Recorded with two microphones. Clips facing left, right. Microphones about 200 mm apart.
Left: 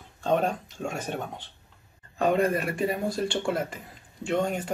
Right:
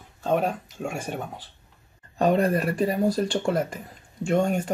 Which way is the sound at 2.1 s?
35° right (ahead or behind).